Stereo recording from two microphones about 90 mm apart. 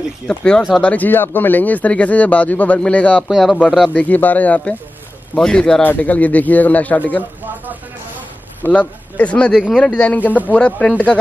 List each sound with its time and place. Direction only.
0.3 s speech: 10° left (ahead or behind)
3.3 s speech: centre (ahead or behind)
3.9 s speech: 15° left (ahead or behind)
8.6 s speech: 15° left (ahead or behind)
9.5 s speech: centre (ahead or behind)
9.9 s speech: 15° left (ahead or behind)